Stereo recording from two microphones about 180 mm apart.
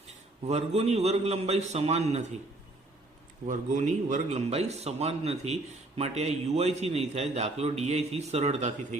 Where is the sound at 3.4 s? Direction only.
45° right (ahead or behind).